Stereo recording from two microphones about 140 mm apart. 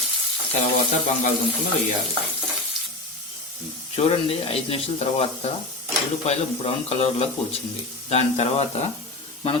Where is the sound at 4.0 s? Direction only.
45° left (ahead or behind).